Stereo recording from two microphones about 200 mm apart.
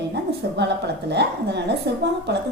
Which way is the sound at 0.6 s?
60° right (ahead or behind).